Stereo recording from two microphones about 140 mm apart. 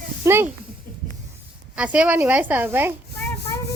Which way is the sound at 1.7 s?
10° right (ahead or behind).